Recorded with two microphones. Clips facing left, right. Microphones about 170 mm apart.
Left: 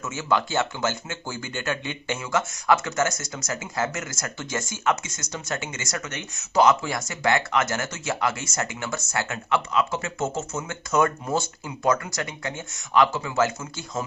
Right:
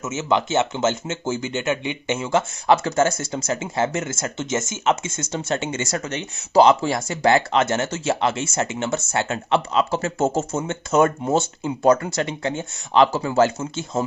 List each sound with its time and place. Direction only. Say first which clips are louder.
0.0 s speech: right 3 dB; 20° right (ahead or behind)